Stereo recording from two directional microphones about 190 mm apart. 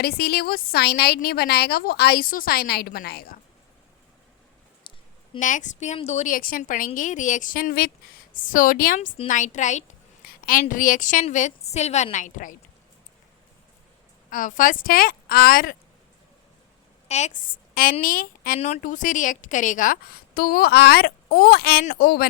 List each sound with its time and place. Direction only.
0.0 s a woman's voice: 55° left (ahead or behind)
4.9 s a sound: 25° left (ahead or behind)
5.4 s a woman's voice: 40° left (ahead or behind)
14.3 s a woman's voice: 45° left (ahead or behind)
17.1 s a woman's voice: 35° left (ahead or behind); by 22.3 s 55° left (ahead or behind)